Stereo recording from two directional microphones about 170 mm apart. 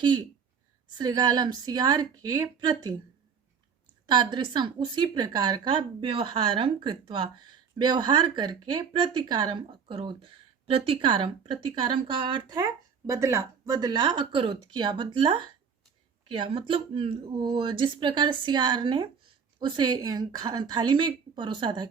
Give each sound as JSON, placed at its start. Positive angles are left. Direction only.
{"t": 0.0, "sound": "speech", "side_deg": -25}
{"t": 4.0, "sound": "speech", "side_deg": -25}